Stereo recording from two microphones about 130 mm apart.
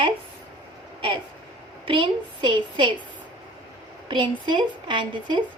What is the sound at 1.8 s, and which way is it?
A woman's voice, 40° right (ahead or behind).